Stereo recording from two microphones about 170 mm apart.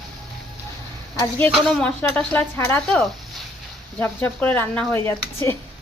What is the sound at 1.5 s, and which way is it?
Speech, 5° left (ahead or behind).